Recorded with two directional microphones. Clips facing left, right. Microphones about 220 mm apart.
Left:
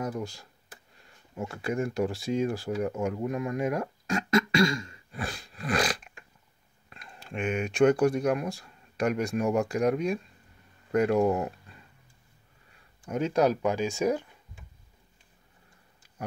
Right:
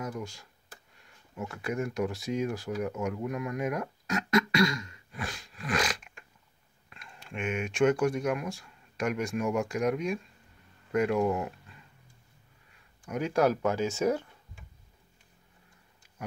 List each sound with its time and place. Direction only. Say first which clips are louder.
0.0 s speech: left 4 dB; 35° left (ahead or behind)
13.0 s speech: left 2 dB; 25° left (ahead or behind)